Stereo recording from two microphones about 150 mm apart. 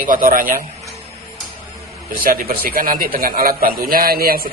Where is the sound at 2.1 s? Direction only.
70° right (ahead or behind).